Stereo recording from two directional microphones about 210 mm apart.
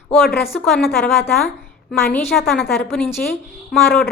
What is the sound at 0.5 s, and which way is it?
Speech, centre (ahead or behind).